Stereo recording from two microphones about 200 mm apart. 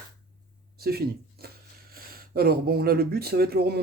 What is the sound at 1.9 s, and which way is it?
Speech, 45° right (ahead or behind).